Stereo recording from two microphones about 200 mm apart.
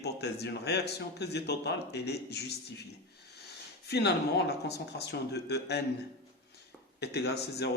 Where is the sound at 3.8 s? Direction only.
55° left (ahead or behind).